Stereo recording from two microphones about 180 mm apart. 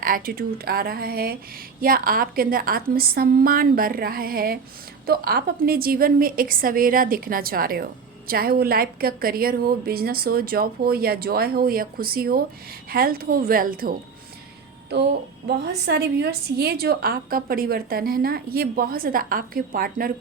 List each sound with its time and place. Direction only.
0.0 s a woman's voice: 50° right (ahead or behind)
15.4 s a woman's voice: 65° right (ahead or behind)